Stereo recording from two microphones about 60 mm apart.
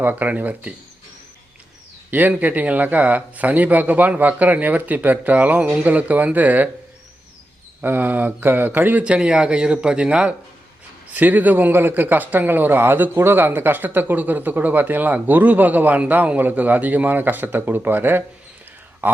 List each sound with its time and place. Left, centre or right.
0.0 s speech: right
2.0 s a man's voice: right
7.8 s speech: right
9.0 s speech: centre
11.1 s speech: right